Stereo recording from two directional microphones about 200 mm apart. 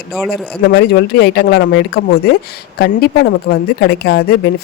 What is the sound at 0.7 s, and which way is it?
A woman's voice, 55° left (ahead or behind).